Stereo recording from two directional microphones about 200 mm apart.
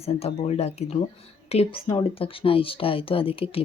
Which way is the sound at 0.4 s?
30° left (ahead or behind).